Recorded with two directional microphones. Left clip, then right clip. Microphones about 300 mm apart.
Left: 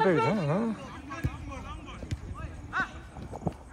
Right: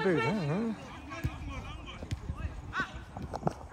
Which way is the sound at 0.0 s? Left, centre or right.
Centre.